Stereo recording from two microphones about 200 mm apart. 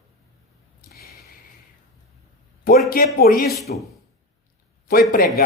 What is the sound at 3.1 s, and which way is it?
Speech, 45° left (ahead or behind).